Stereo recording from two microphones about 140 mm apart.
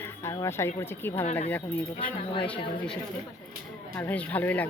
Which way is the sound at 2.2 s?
40° left (ahead or behind).